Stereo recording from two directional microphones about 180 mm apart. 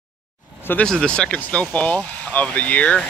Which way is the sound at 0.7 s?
5° left (ahead or behind).